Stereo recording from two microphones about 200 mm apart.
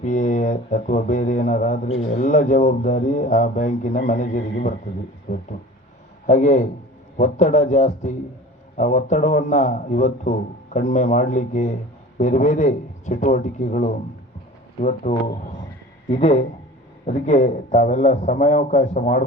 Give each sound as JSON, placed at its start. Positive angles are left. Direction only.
{"t": 0.0, "sound": "speech", "side_deg": 40}
{"t": 6.2, "sound": "speech", "side_deg": 35}